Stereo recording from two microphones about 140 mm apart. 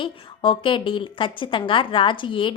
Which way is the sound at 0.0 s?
35° left (ahead or behind).